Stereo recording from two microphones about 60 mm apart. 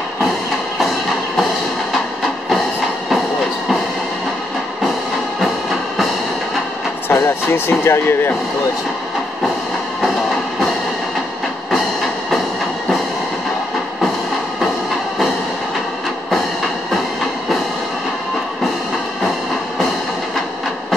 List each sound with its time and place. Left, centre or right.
7.1 s speech: left